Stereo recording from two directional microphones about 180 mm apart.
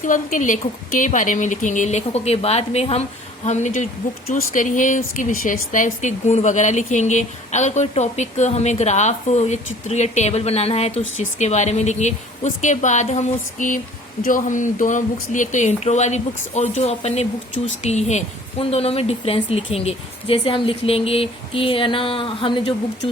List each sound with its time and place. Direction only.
0.0 s speech: 45° left (ahead or behind); by 22.7 s 30° left (ahead or behind)